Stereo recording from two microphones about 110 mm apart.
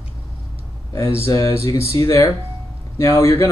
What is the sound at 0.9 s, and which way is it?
Speech, 25° left (ahead or behind).